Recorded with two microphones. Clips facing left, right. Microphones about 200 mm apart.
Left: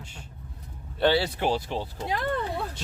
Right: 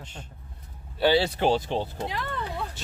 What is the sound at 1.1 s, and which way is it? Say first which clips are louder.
Speech: right 3 dB; 25° right (ahead or behind).